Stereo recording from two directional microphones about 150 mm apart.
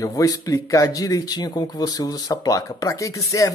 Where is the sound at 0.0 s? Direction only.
20° left (ahead or behind).